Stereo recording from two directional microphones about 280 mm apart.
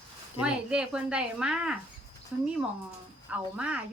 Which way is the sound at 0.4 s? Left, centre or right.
Centre.